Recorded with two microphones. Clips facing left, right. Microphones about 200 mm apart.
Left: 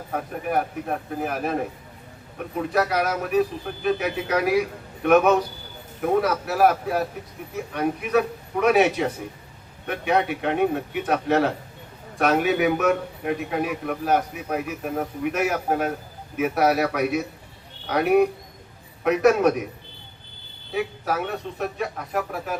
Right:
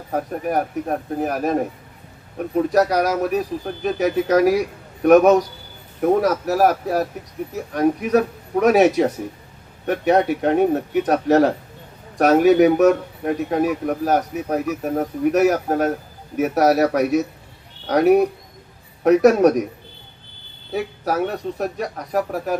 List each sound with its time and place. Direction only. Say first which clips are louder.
0.1 s a man's voice: right 4 dB; 40° right (ahead or behind)
2.6 s a man's voice: right 6 dB; 40° right (ahead or behind)
20.7 s a man's voice: right 4 dB; 40° right (ahead or behind)